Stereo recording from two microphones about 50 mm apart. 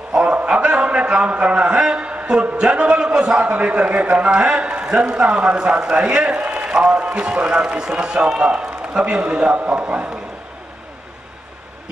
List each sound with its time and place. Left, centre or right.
0.1 s a sound: right
2.5 s a man's voice: centre
3.5 s a man's voice: right
7.6 s a man's voice: centre